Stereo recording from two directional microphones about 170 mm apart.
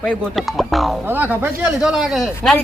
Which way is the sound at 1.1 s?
10° right (ahead or behind).